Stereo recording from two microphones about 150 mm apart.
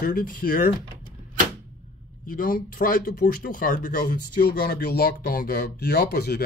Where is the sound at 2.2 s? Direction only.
65° left (ahead or behind); by 6.4 s 90° left.